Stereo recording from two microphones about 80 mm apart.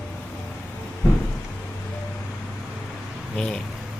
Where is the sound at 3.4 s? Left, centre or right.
Centre.